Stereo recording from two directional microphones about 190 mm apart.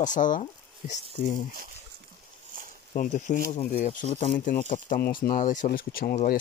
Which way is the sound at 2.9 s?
40° left (ahead or behind).